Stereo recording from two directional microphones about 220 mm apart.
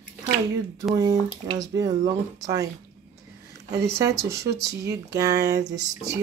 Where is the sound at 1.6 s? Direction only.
15° right (ahead or behind).